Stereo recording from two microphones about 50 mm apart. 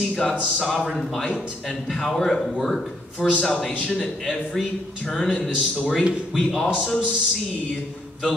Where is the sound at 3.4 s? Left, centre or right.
Centre.